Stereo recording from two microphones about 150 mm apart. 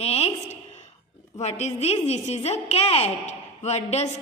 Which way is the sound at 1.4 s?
45° left (ahead or behind).